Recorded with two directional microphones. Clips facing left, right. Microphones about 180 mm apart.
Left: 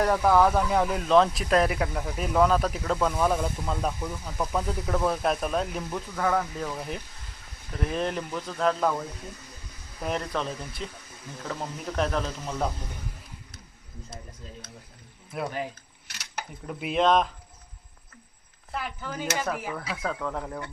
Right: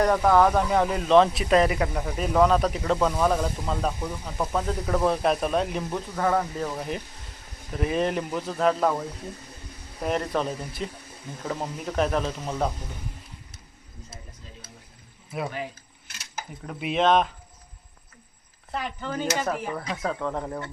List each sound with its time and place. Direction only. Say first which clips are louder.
0.0 s speech: right 2 dB; 5° left (ahead or behind)
4.0 s speech: right 2 dB; 15° right (ahead or behind)
4.5 s speech: right 2 dB; centre (ahead or behind)
5.9 s speech: right 1 dB; 10° right (ahead or behind)
6.7 s speech: right 3 dB; centre (ahead or behind)
10.0 s speech: right 4 dB; centre (ahead or behind)
15.3 s speech: right 1 dB; centre (ahead or behind)
16.0 s a sound: left 1 dB; 70° left (ahead or behind)
16.6 s speech: right 1 dB; centre (ahead or behind)
18.7 s speech: right 3 dB; 5° left (ahead or behind)